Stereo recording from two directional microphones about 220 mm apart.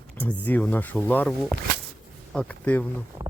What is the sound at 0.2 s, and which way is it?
Speech, 5° left (ahead or behind).